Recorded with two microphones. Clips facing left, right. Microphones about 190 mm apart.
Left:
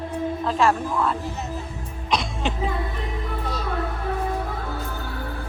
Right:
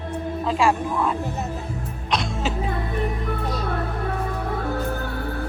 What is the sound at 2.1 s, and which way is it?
Music, centre (ahead or behind).